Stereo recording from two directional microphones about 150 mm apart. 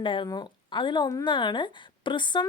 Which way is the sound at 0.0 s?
30° left (ahead or behind).